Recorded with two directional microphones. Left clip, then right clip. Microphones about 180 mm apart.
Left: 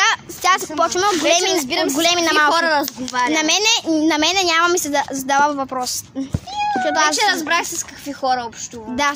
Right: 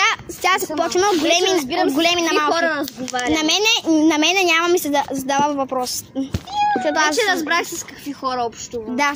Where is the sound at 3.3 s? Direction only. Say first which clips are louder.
Right 1 dB; 10° left (ahead or behind).